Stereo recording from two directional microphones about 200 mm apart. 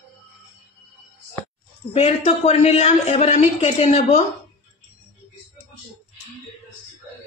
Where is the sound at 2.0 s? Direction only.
35° left (ahead or behind).